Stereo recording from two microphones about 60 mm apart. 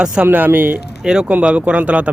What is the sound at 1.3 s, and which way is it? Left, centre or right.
Speech, right.